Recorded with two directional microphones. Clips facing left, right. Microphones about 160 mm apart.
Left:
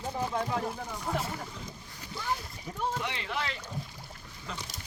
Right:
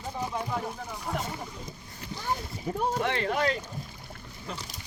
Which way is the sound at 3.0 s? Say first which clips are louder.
Right 7 dB; 50° right (ahead or behind).